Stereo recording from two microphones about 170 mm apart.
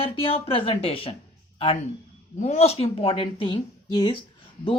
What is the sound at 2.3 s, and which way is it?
Speech, 40° left (ahead or behind).